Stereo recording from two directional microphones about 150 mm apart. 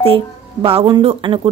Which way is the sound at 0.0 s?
40° right (ahead or behind).